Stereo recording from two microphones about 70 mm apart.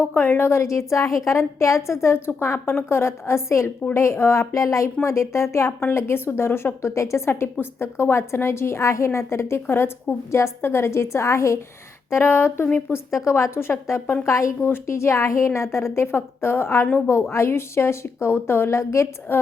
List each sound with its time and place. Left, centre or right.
0.1 s a woman's voice: left